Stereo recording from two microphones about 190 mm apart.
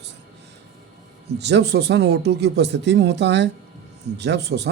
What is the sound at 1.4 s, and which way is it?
Speech, 65° right (ahead or behind).